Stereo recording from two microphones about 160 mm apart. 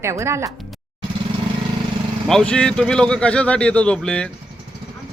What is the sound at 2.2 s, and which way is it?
Speech, 5° left (ahead or behind).